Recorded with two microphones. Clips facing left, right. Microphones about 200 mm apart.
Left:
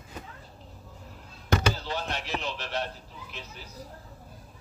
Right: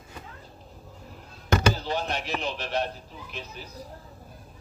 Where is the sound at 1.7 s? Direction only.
15° right (ahead or behind).